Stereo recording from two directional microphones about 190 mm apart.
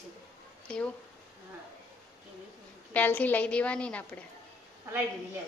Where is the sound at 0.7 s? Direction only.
5° left (ahead or behind).